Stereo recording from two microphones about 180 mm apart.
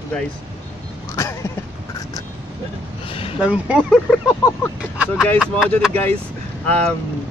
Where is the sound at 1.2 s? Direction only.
15° left (ahead or behind).